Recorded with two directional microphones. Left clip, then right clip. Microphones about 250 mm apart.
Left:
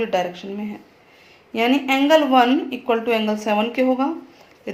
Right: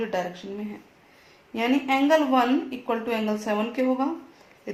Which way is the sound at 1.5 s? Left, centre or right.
Left.